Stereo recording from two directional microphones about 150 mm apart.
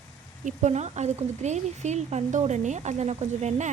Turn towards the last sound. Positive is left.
turn(degrees=-50)  # may be behind; listen again after turning